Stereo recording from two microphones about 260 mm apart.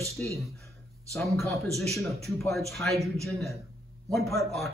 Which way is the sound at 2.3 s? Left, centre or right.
Centre.